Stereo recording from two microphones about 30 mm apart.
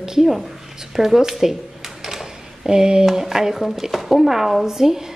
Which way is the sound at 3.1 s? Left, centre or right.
Centre.